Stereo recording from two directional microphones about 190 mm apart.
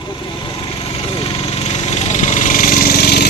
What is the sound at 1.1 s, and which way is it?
Vehicle, 30° left (ahead or behind).